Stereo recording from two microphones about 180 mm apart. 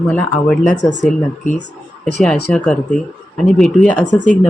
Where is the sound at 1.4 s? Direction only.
45° left (ahead or behind).